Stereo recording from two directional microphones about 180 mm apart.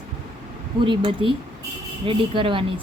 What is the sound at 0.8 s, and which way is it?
A woman's voice, 30° right (ahead or behind).